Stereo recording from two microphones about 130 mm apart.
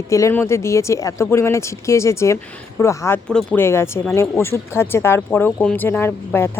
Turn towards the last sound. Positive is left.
turn(degrees=15)  # may be behind; listen again after turning